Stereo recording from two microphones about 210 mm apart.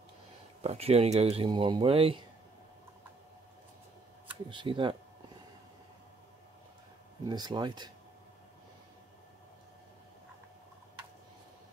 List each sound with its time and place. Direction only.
0.6 s speech: 30° right (ahead or behind)
4.5 s speech: 25° right (ahead or behind)
7.2 s speech: 20° right (ahead or behind)